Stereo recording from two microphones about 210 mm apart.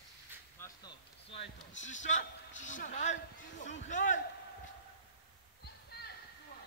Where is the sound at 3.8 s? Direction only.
35° left (ahead or behind).